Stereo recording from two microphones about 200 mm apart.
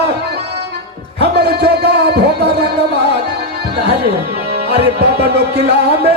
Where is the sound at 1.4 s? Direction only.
55° right (ahead or behind).